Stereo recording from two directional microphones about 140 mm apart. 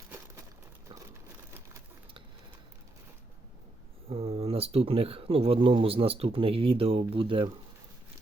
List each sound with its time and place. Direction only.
4.1 s speech: 45° right (ahead or behind)